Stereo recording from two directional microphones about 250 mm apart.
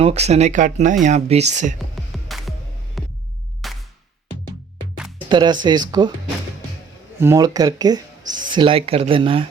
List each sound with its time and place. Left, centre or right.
0.0 s speech: right
2.1 s music: centre
3.0 s hum: centre
3.6 s music: centre
5.3 s speech: centre
7.2 s speech: centre